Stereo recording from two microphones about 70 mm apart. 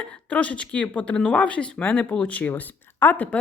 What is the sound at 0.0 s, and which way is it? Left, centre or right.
Speech, centre.